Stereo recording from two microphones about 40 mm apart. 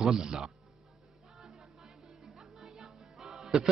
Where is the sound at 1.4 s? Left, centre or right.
Centre.